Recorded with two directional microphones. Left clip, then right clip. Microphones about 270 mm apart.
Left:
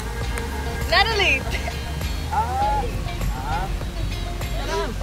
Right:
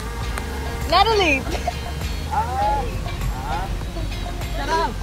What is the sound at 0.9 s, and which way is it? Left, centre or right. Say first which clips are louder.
Music: right 2 dB; centre.